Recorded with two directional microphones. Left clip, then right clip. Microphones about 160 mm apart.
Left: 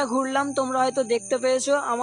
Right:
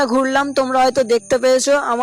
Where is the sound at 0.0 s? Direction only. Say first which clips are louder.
Right 8 dB; 35° right (ahead or behind).